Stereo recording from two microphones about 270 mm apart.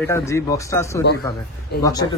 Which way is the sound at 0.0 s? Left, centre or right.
Centre.